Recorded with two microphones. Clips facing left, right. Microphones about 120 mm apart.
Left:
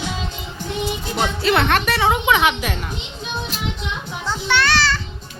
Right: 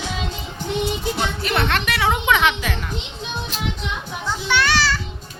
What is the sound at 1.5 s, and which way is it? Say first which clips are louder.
Speech: left 2 dB; 55° left (ahead or behind).